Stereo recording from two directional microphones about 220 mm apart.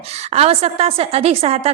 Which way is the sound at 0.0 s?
30° right (ahead or behind).